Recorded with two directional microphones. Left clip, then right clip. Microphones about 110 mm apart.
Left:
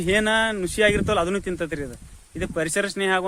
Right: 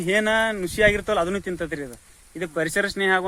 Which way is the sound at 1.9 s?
25° left (ahead or behind).